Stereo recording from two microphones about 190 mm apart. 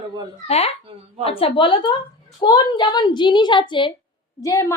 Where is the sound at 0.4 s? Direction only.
35° left (ahead or behind).